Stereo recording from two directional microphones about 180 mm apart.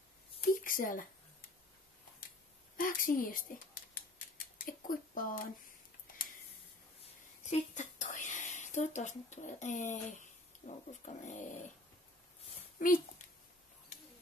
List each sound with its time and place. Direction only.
0.6 s a sound: 50° left (ahead or behind)
2.8 s speech: 50° left (ahead or behind)
7.4 s speech: 40° left (ahead or behind)
12.7 s a child's voice: 50° left (ahead or behind)